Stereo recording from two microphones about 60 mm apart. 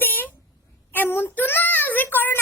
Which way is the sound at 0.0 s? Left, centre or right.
Left.